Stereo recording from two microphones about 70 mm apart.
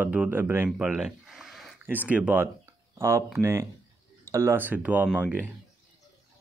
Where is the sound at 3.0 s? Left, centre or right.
Right.